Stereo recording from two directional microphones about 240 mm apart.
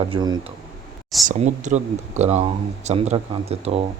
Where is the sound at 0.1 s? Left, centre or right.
Centre.